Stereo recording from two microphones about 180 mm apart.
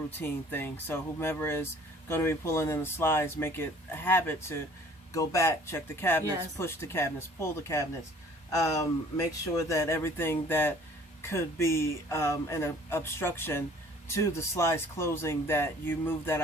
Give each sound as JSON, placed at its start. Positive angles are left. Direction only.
{"t": 0.2, "sound": "speech", "side_deg": 10}